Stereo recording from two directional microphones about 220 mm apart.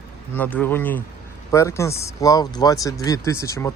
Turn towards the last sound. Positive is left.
turn(degrees=15)  # may be behind; listen again after turning